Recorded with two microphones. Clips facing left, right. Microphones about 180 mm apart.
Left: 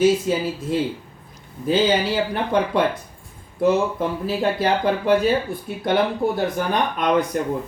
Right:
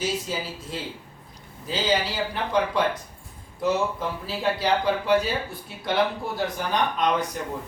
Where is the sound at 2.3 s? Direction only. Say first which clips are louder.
Left 1 dB; 55° left (ahead or behind).